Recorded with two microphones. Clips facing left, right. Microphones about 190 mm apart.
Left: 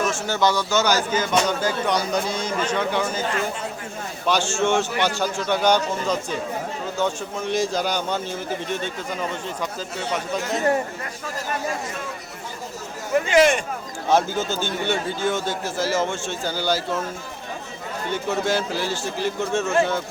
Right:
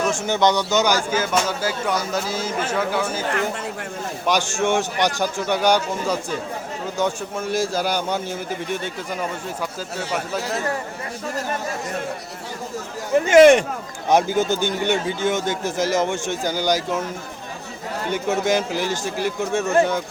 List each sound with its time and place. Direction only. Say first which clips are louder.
0.1 s speech: right 3 dB; 20° right (ahead or behind)
4.3 s speech: even; 15° right (ahead or behind)
10.1 s speech: left 1 dB; 5° right (ahead or behind)
13.3 s speech: right 7 dB; 60° right (ahead or behind)
14.1 s speech: right 3 dB; 15° right (ahead or behind)
18.1 s speech: right 3 dB; 15° right (ahead or behind)